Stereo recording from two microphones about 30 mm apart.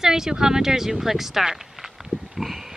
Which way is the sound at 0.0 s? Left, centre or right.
Centre.